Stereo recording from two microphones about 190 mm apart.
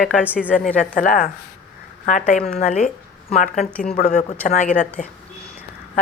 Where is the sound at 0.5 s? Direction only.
5° left (ahead or behind).